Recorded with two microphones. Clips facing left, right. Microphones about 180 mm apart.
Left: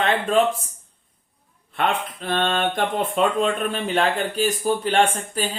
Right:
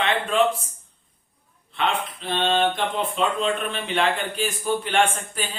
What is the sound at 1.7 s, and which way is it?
Speech, 50° left (ahead or behind).